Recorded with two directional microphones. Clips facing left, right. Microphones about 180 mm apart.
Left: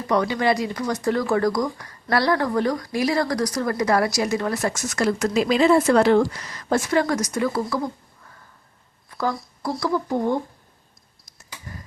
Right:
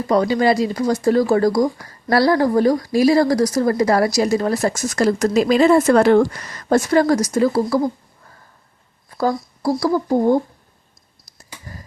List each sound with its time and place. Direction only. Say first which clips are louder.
0.1 s speech: right 5 dB; 30° right (ahead or behind)
9.0 s speech: right 6 dB; 35° right (ahead or behind)